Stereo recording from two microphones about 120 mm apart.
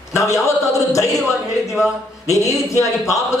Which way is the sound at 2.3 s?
25° left (ahead or behind).